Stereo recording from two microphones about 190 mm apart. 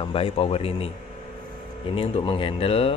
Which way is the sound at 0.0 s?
30° left (ahead or behind).